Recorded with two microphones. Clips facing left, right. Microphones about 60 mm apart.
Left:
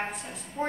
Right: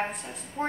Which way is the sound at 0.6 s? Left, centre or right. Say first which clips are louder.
Even; centre.